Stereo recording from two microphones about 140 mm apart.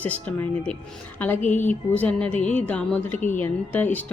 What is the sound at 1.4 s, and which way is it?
Speech, 60° left (ahead or behind).